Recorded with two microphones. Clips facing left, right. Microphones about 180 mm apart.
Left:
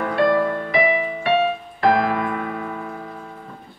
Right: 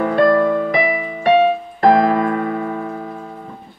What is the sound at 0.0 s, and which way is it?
Music, 45° right (ahead or behind).